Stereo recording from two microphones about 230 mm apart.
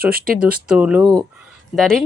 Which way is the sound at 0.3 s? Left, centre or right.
Centre.